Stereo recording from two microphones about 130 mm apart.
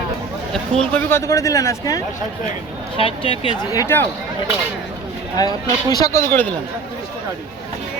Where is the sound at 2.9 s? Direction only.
45° left (ahead or behind).